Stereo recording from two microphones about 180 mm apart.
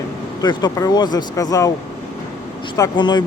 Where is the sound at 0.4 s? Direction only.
25° left (ahead or behind).